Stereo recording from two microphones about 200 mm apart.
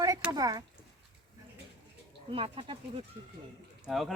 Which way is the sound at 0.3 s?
20° right (ahead or behind).